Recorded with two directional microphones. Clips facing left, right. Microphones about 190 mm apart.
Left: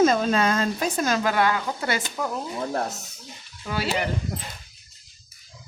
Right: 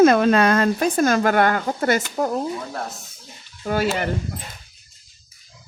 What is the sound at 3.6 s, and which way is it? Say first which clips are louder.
Speech: right 7 dB; 50° right (ahead or behind).